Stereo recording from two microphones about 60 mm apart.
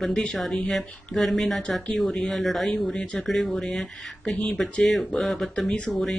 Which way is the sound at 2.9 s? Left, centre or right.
Centre.